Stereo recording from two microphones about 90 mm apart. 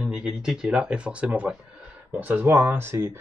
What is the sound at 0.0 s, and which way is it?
Speech, 10° right (ahead or behind).